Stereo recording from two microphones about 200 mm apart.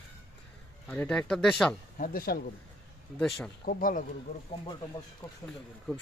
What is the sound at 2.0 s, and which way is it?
Speech, 45° left (ahead or behind).